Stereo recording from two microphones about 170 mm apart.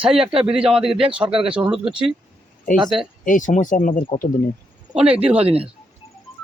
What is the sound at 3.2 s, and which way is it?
Speech, 50° left (ahead or behind).